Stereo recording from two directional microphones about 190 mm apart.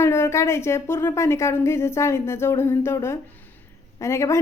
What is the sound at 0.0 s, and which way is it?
A woman's voice, 15° left (ahead or behind).